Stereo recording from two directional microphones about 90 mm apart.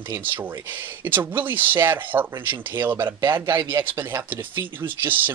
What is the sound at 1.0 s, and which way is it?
Speech, 25° right (ahead or behind).